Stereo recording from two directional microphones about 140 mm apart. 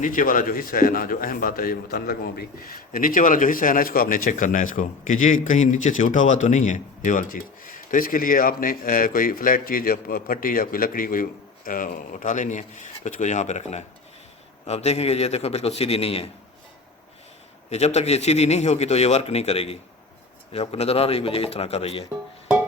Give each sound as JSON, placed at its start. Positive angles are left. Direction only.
{"t": 0.0, "sound": "a man's voice", "side_deg": 70}
{"t": 17.7, "sound": "a man's voice", "side_deg": 50}